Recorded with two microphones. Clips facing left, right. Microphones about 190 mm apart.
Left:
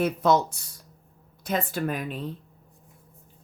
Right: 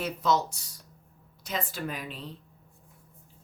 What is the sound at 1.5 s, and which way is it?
Speech, 55° left (ahead or behind).